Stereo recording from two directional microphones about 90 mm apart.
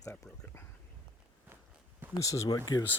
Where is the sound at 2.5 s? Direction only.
50° left (ahead or behind).